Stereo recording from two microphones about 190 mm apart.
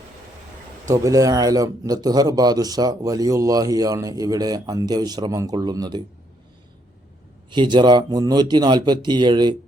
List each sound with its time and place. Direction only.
0.9 s speech: 15° right (ahead or behind)
7.5 s speech: 25° right (ahead or behind)